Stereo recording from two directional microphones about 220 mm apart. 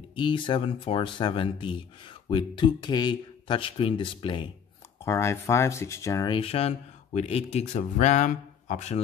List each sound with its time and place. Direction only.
0.1 s speech: 20° left (ahead or behind)
5.0 s speech: 10° left (ahead or behind); by 9.0 s 30° left (ahead or behind)